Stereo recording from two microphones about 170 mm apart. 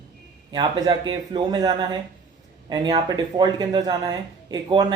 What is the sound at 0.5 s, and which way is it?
Speech, 25° right (ahead or behind).